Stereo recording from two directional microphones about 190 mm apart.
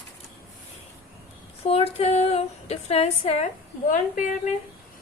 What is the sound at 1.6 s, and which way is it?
Female singing, 30° left (ahead or behind).